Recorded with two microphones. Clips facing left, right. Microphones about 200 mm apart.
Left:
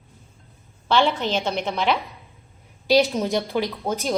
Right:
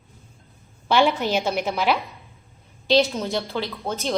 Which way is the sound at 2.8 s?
10° left (ahead or behind).